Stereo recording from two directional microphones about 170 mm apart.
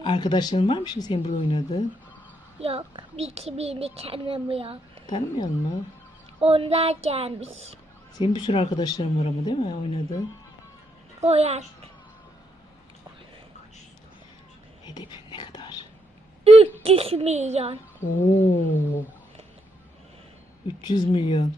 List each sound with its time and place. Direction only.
0.0 s speech: 25° left (ahead or behind)
2.6 s a child's voice: 35° right (ahead or behind)
5.0 s speech: 25° left (ahead or behind)
6.4 s a child's voice: 35° right (ahead or behind)
8.2 s speech: 25° left (ahead or behind)
11.2 s a child's voice: 40° right (ahead or behind)
14.8 s whispering: 25° left (ahead or behind)
16.4 s a child's voice: 35° right (ahead or behind)
18.2 s a sound: 10° left (ahead or behind)
20.7 s speech: 25° left (ahead or behind)